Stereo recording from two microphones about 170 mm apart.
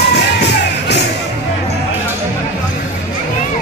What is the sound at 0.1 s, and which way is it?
Music, 80° left.